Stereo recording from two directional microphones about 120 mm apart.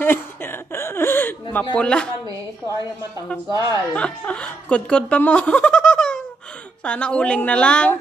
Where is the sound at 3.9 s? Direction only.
10° left (ahead or behind).